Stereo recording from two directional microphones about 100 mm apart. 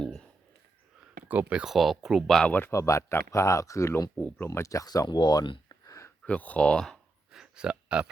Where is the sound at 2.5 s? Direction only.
20° left (ahead or behind).